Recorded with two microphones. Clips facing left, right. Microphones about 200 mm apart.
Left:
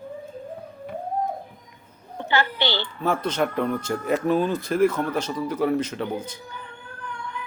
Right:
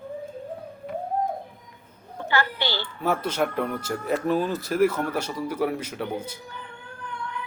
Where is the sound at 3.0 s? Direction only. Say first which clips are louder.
Left 1 dB; 10° right (ahead or behind).